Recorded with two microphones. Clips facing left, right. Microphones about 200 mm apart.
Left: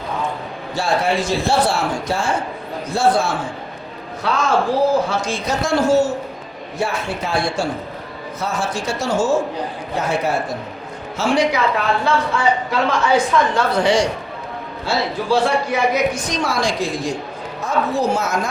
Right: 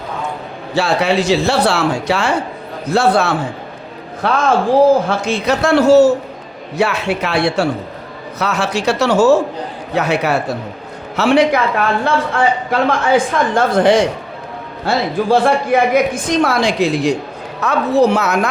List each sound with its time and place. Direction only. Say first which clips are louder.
0.8 s speech: right 4 dB; 75° right (ahead or behind)
4.2 s a woman's voice: right 4 dB; 55° right (ahead or behind)